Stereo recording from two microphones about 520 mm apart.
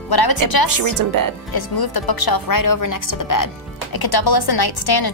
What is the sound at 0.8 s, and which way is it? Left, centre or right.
Speech, right.